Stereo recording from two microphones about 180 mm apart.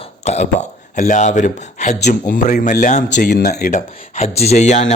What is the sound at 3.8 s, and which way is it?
A man's voice, 40° left (ahead or behind).